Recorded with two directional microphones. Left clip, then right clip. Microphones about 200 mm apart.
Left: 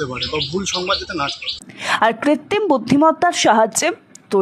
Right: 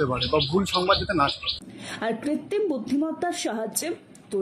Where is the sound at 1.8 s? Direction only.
40° left (ahead or behind).